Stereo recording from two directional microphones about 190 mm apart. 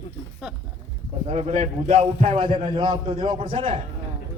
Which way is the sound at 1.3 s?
35° right (ahead or behind).